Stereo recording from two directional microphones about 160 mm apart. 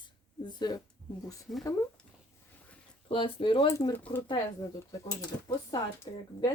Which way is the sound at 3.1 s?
35° left (ahead or behind).